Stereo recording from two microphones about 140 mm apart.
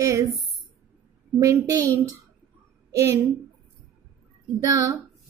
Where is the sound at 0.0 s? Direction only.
20° right (ahead or behind).